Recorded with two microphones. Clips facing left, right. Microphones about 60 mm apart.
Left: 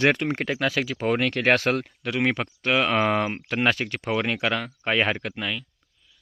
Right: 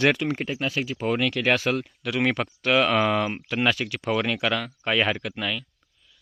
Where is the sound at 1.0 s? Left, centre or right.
Left.